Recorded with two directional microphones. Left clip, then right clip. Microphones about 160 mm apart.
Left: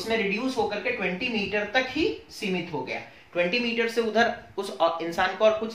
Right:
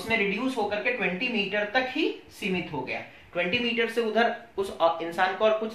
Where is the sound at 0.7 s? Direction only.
20° left (ahead or behind).